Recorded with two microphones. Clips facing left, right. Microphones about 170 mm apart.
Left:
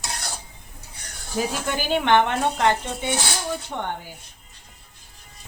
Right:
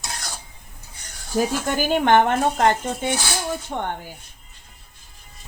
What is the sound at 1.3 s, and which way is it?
A woman's voice, 45° right (ahead or behind).